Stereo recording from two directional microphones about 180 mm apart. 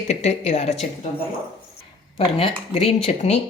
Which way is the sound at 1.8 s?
35° left (ahead or behind).